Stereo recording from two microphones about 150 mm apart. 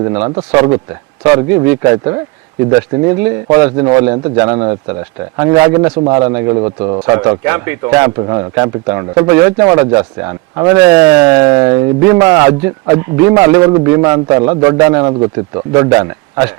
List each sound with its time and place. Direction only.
0.3 s a man's voice: 25° right (ahead or behind)
6.6 s a man's voice: 30° right (ahead or behind)
7.4 s a man's voice: 15° right (ahead or behind)
15.5 s speech: 30° right (ahead or behind)
15.9 s speech: 20° right (ahead or behind)